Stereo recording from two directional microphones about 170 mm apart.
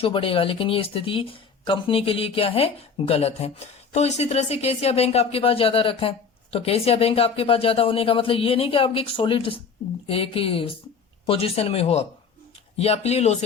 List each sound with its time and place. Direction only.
0.0 s speech: 30° left (ahead or behind)